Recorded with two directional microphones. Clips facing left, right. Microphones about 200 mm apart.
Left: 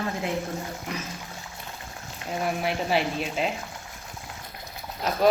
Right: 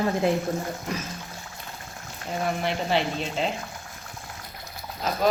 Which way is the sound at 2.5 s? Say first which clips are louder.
Even; 5° left (ahead or behind).